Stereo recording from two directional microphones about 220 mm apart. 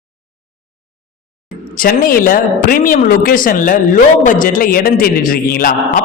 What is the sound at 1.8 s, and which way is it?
Speech, 40° left (ahead or behind).